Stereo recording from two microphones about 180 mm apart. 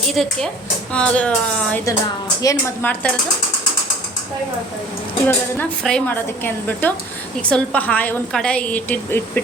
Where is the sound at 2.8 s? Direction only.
5° left (ahead or behind).